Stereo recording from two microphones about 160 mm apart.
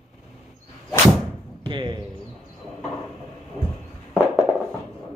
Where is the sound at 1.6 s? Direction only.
30° right (ahead or behind).